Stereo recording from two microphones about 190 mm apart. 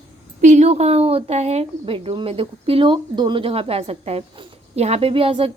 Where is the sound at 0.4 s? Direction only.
35° right (ahead or behind).